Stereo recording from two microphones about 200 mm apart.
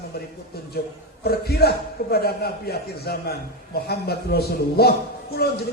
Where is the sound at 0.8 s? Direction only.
50° left (ahead or behind).